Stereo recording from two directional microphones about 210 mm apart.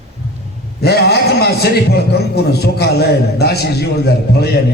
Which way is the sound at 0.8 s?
50° left (ahead or behind).